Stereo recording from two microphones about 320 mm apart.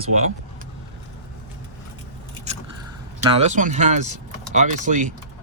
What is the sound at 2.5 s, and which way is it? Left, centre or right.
Biting, right.